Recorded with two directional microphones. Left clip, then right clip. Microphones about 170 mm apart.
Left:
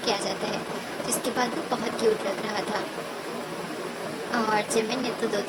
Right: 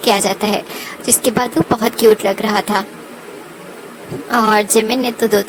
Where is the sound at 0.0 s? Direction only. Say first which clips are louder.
Right 13 dB; 55° right (ahead or behind).